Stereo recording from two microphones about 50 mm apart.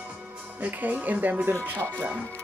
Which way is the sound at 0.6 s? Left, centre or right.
Right.